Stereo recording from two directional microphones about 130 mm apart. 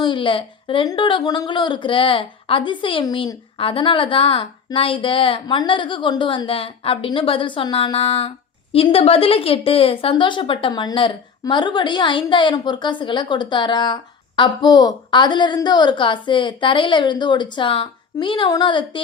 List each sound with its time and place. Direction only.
0.0 s a woman's voice: 40° left (ahead or behind)